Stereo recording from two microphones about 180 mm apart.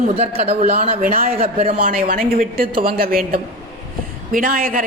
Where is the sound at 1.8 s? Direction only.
50° right (ahead or behind).